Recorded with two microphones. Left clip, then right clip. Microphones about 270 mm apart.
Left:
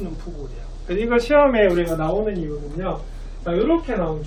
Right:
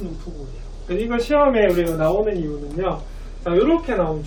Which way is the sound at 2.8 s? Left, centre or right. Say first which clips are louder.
Right 4 dB; centre.